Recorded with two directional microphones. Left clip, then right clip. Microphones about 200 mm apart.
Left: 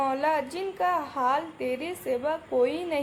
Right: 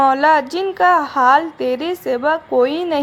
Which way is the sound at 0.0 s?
25° right (ahead or behind).